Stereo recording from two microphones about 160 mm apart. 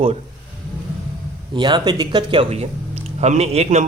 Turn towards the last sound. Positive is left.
turn(degrees=-40)  # may be behind; listen again after turning